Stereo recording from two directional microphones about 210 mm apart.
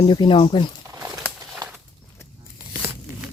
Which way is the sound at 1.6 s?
20° right (ahead or behind).